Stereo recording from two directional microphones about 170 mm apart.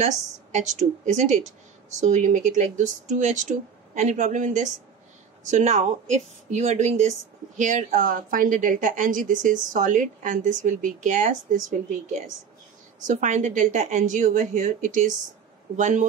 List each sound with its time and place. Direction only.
0.5 s a woman's voice: 45° right (ahead or behind)
13.0 s a woman's voice: 45° right (ahead or behind)